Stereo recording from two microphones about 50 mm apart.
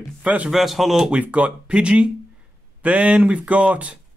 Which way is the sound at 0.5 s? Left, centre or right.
Centre.